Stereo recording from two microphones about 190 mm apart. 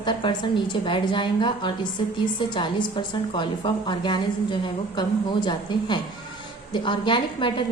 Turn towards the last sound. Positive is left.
turn(degrees=25)  # may be behind; listen again after turning